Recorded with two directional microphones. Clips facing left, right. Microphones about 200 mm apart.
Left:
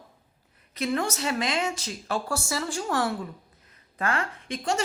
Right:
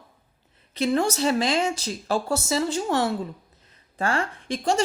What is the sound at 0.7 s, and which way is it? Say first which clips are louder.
Speech: right 5 dB; 30° right (ahead or behind).